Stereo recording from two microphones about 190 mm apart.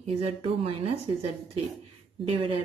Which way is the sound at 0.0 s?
30° right (ahead or behind).